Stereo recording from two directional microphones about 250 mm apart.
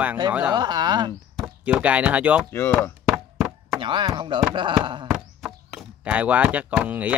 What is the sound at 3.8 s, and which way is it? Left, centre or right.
Speech, centre.